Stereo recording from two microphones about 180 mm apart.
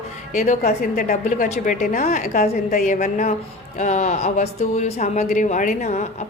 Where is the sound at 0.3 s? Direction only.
45° left (ahead or behind).